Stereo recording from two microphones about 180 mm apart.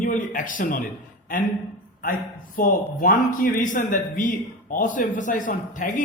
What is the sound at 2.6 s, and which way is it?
A man's voice, 50° left (ahead or behind).